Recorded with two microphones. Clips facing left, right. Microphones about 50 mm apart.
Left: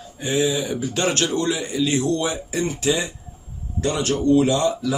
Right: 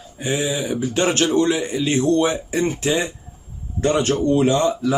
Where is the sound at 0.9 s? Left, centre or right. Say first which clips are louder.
Right 4 dB; right.